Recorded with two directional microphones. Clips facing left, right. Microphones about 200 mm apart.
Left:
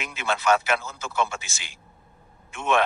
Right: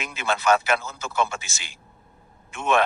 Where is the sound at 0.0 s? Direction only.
40° right (ahead or behind).